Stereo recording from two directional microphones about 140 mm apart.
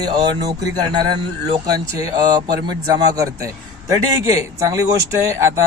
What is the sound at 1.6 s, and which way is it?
Speech, 30° right (ahead or behind).